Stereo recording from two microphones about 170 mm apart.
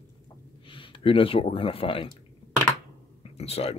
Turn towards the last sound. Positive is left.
turn(degrees=35)  # may be behind; listen again after turning